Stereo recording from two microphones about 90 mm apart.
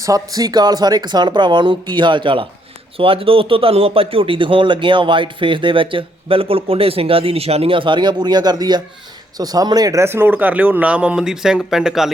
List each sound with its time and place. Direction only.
0.0 s speech: 40° right (ahead or behind); by 2.5 s 70° right (ahead or behind)
3.0 s speech: 90° right; by 10.0 s 45° right (ahead or behind)
10.0 s speech: 25° right (ahead or behind); by 12.1 s 5° right (ahead or behind)